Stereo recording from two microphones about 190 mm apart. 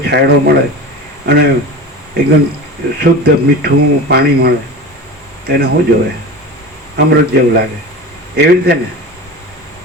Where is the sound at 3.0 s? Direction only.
55° right (ahead or behind).